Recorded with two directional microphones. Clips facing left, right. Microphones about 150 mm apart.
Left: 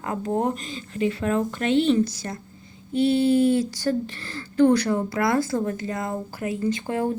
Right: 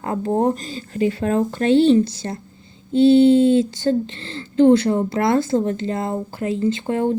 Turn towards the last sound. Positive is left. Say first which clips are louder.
# right 5 dB
turn(degrees=-25)  # may be behind; listen again after turning